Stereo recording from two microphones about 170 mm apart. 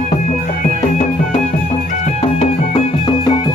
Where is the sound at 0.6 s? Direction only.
45° left (ahead or behind).